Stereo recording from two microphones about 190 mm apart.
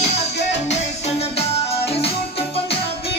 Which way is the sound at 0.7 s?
35° left (ahead or behind).